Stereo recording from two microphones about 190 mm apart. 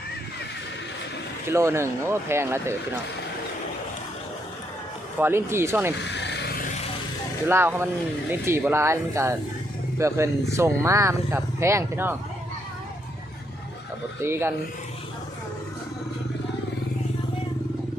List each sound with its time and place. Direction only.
1.5 s speech: 15° right (ahead or behind)
5.2 s speech: 10° right (ahead or behind)
6.1 s vehicle: 65° left (ahead or behind)
7.4 s speech: 10° right (ahead or behind)
14.2 s speech: 10° right (ahead or behind)